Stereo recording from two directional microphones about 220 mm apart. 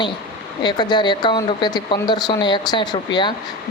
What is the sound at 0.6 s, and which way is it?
Speech, 20° left (ahead or behind).